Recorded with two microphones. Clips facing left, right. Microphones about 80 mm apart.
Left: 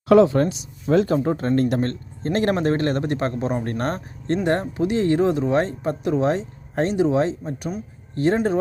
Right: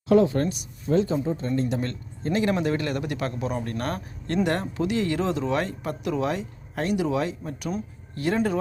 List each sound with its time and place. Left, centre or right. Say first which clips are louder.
0.1 s speech: left 5 dB; left
1.8 s a man's voice: left 5 dB; left